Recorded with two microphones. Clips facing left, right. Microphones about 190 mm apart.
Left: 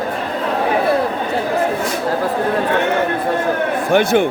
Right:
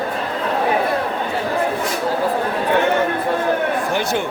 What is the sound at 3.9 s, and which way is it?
Speech, 55° left (ahead or behind).